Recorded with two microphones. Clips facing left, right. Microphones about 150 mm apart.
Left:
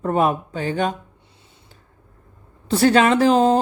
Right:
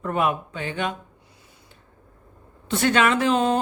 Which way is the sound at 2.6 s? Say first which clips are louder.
Left 5 dB; 35° left (ahead or behind).